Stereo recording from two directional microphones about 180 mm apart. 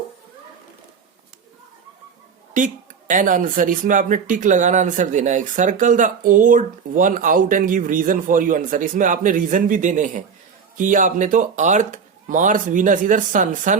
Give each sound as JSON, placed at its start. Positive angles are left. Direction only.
{"t": 2.5, "sound": "speech", "side_deg": -45}